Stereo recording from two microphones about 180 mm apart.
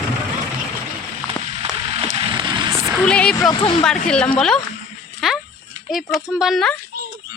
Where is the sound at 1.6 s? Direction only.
35° right (ahead or behind).